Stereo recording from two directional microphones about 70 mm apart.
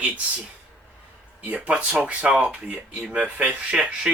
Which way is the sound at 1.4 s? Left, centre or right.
Centre.